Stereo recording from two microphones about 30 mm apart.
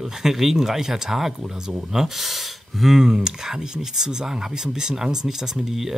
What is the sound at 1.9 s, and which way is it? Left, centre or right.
Speech, right.